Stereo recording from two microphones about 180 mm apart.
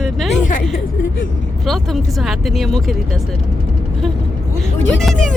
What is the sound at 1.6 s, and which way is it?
Speech, centre (ahead or behind).